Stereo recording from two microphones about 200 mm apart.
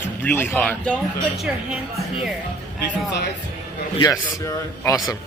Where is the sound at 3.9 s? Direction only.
20° left (ahead or behind).